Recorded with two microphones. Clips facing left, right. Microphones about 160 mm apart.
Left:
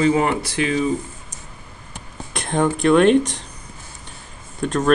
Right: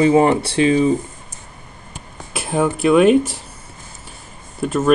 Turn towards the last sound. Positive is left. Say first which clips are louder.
# right 2 dB
turn(degrees=-5)  # may be behind; listen again after turning